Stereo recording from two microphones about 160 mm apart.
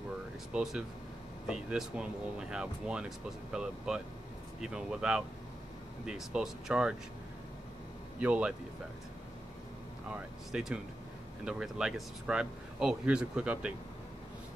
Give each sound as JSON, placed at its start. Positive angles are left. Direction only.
{"t": 0.5, "sound": "speech", "side_deg": -5}
{"t": 8.2, "sound": "speech", "side_deg": -10}
{"t": 10.1, "sound": "speech", "side_deg": -5}